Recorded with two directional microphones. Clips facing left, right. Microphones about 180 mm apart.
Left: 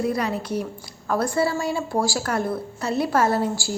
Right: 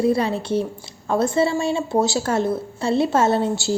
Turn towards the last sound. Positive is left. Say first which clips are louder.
# right 3 dB
turn(degrees=-25)  # may be behind; listen again after turning